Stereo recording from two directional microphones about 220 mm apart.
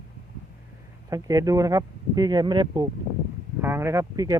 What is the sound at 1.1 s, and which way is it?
Speech, 15° right (ahead or behind).